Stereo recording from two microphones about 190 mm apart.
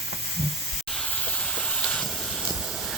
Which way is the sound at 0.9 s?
5° left (ahead or behind).